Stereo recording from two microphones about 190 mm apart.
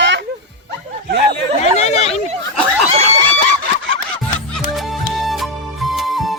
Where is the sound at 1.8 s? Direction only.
35° left (ahead or behind).